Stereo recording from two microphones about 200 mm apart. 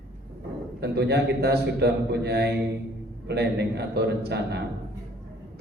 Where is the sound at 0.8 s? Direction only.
55° right (ahead or behind).